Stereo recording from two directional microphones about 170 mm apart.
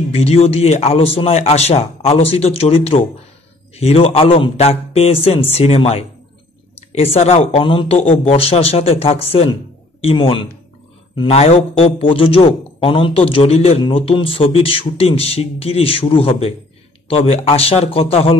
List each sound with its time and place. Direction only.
0.1 s a man's voice: 35° left (ahead or behind)